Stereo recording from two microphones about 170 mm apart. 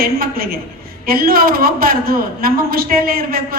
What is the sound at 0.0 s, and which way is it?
A man's voice, 60° right (ahead or behind).